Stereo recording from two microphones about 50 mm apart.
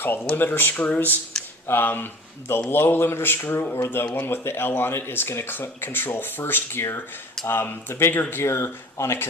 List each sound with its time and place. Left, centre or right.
0.0 s speech: left